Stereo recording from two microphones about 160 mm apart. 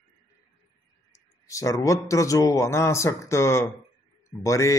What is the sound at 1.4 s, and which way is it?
Speech, 20° left (ahead or behind).